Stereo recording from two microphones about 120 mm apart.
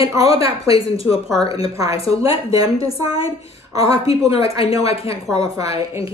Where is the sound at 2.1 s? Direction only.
30° right (ahead or behind).